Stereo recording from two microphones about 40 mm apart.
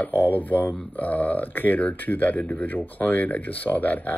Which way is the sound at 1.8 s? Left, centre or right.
Left.